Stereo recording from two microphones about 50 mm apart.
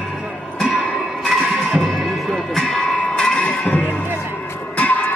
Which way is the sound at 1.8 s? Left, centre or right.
Centre.